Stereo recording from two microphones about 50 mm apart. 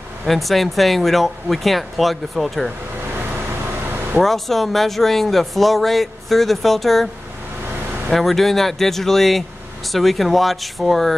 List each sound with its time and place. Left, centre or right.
0.3 s speech: centre
3.8 s air conditioning: right
4.2 s speech: centre
8.1 s speech: centre